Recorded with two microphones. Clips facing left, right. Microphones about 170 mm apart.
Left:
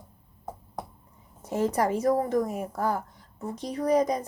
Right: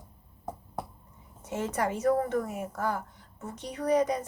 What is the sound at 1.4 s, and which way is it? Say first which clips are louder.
A woman's voice: left 5 dB; 35° left (ahead or behind).